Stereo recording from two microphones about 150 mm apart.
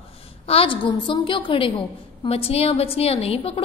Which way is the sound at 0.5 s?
35° left (ahead or behind).